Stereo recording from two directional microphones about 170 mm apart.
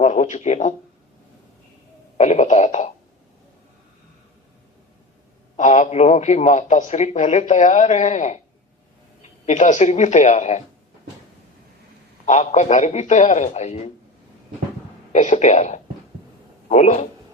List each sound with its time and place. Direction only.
0.0 s a sound: 45° left (ahead or behind)
2.1 s speech: 45° left (ahead or behind)
5.5 s speech: 45° left (ahead or behind)
12.2 s speech: 45° left (ahead or behind)
15.1 s a man's voice: 45° left (ahead or behind)